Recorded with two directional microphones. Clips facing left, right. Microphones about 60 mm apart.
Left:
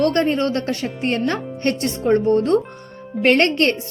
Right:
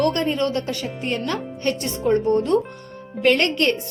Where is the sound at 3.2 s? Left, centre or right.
Left.